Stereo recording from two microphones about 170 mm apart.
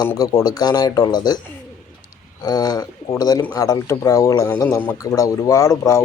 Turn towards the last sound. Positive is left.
turn(degrees=20)  # may be behind; listen again after turning